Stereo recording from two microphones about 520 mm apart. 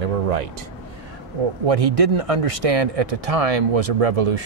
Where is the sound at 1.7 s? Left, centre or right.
Right.